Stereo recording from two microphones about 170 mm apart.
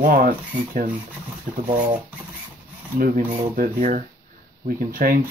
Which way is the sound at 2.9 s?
55° right (ahead or behind).